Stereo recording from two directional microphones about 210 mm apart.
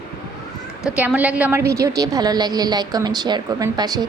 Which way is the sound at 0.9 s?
5° right (ahead or behind).